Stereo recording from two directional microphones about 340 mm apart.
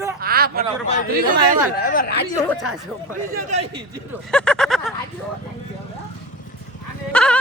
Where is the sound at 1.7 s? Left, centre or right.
Left.